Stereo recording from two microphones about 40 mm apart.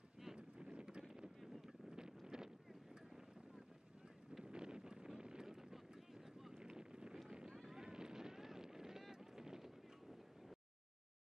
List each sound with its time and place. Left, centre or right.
0.4 s wind noise: right
1.0 s boat: centre
1.9 s wind noise: centre
4.5 s wind noise: right
6.5 s boat: centre
7.2 s a sound: centre
7.5 s vehicle: centre
7.8 s boat: centre